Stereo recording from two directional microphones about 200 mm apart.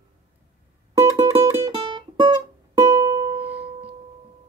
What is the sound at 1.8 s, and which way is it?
Music, 20° right (ahead or behind).